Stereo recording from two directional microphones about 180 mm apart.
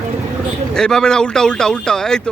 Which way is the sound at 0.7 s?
5° left (ahead or behind).